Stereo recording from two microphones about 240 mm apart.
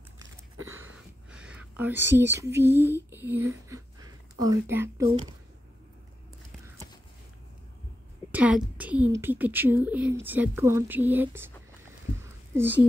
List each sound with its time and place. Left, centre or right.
0.7 s whispering: centre
3.1 s speech: centre
8.3 s a woman's voice: centre
12.5 s a woman's voice: centre